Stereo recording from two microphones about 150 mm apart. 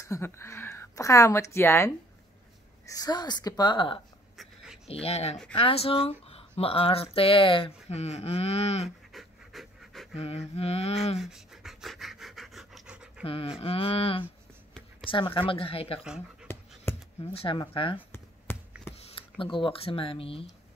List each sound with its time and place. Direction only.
0.0 s a woman's voice: 20° left (ahead or behind)
2.9 s a woman's voice: 25° left (ahead or behind)
4.8 s a sound: 45° left (ahead or behind)
5.5 s speech: 40° left (ahead or behind)
9.1 s pant: centre (ahead or behind)
10.1 s a sound: 40° left (ahead or behind)
11.1 s pant: centre (ahead or behind)
13.2 s speech: 40° left (ahead or behind)
16.5 s dog: 15° left (ahead or behind)
16.9 s a sound: 15° left (ahead or behind)
17.2 s speech: 40° left (ahead or behind)
18.5 s a sound: 15° left (ahead or behind)
19.0 s speech: 35° left (ahead or behind)